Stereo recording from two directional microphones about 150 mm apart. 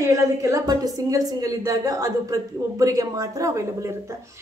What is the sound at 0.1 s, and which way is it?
A woman's voice, 20° right (ahead or behind).